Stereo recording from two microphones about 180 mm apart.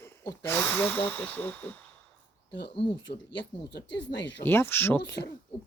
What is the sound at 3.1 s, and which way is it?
Speech, 50° left (ahead or behind).